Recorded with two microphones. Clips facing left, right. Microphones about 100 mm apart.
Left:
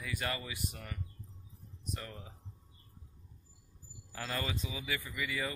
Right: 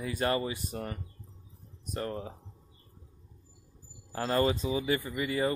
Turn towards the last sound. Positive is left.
turn(degrees=-40)  # may be behind; listen again after turning